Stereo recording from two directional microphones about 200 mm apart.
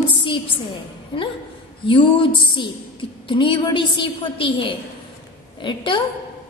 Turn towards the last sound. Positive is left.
turn(degrees=25)  # may be behind; listen again after turning